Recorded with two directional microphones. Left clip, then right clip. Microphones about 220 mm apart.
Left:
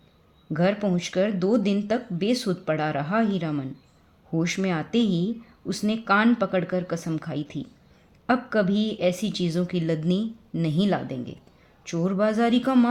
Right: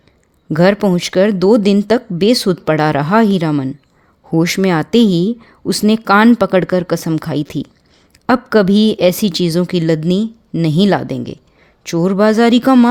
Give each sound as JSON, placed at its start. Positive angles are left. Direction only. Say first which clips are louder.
{"t": 0.5, "sound": "speech", "louder": "right 12 dB", "side_deg": -50}